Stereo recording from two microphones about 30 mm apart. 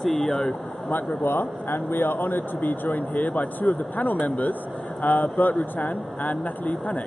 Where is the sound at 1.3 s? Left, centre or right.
Left.